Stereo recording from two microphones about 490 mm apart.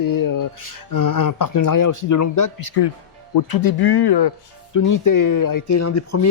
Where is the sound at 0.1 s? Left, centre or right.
Left.